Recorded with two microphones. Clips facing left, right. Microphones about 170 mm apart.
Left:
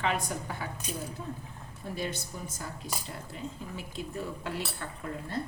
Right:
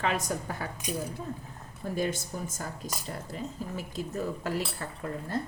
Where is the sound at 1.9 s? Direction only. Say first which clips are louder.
Right 5 dB; 45° right (ahead or behind).